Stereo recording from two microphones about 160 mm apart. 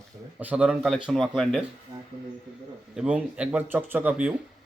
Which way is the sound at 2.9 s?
5° right (ahead or behind).